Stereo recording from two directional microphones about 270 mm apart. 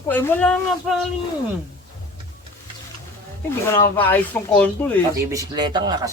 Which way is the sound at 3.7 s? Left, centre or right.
Centre.